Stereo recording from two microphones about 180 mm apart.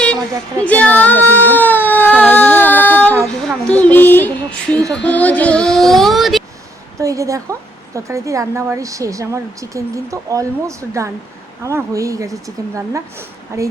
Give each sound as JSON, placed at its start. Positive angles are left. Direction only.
{"t": 0.6, "sound": "a sound", "side_deg": 5}
{"t": 5.0, "sound": "child singing", "side_deg": 10}
{"t": 7.0, "sound": "a woman's voice", "side_deg": -20}